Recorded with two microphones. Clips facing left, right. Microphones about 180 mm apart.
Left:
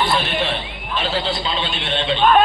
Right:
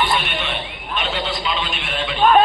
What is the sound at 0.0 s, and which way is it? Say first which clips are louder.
A man's voice: left 2 dB; 35° left (ahead or behind).